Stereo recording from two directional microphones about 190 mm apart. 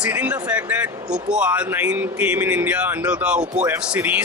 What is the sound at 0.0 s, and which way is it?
Speech, 5° right (ahead or behind).